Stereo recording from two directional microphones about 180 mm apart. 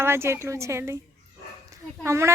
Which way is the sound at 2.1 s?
15° right (ahead or behind).